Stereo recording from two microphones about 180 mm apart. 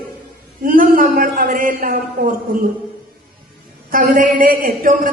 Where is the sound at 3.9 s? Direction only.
50° right (ahead or behind).